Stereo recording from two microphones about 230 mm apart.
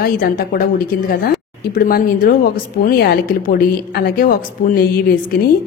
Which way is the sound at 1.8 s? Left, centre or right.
Left.